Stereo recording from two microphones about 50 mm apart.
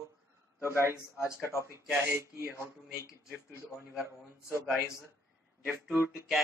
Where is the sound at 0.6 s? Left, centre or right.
Left.